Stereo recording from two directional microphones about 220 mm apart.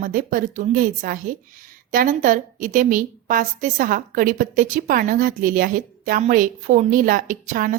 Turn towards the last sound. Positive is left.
turn(degrees=-35)  # may be behind; listen again after turning